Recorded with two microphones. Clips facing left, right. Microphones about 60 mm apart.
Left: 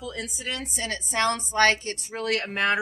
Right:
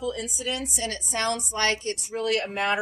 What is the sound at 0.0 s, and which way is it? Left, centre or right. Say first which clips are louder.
A woman's voice: right 4 dB; left.